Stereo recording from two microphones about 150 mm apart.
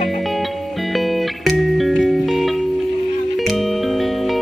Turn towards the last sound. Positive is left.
turn(degrees=0)  # may be behind; listen again after turning